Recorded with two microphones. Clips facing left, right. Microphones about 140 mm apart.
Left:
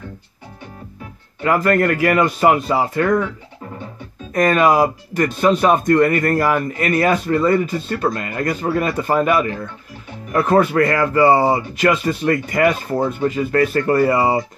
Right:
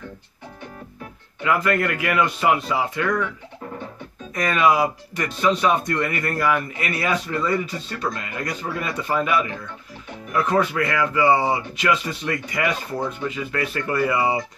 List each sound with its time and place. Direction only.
1.4 s speech: 45° left (ahead or behind)
4.3 s speech: 45° left (ahead or behind)